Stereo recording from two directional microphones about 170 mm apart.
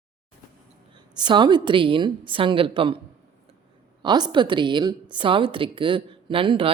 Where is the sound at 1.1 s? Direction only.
25° right (ahead or behind).